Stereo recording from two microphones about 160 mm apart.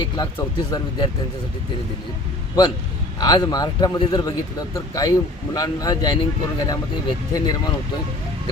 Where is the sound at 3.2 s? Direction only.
25° left (ahead or behind).